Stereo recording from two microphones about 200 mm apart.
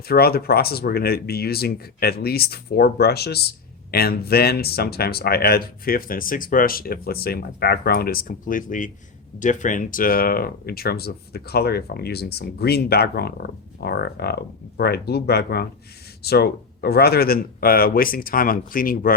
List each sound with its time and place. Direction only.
0.1 s speech: 50° left (ahead or behind)